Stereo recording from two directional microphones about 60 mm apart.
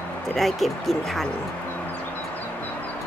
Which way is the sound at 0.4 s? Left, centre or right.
Centre.